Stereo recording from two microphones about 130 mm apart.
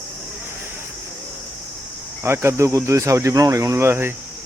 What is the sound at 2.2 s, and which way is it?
Speech, 20° right (ahead or behind).